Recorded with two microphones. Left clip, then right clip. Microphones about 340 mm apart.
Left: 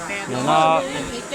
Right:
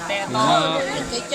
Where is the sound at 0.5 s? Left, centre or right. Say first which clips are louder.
Left 4 dB; centre.